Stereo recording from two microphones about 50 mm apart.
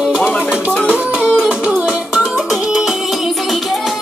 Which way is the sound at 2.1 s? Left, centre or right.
Centre.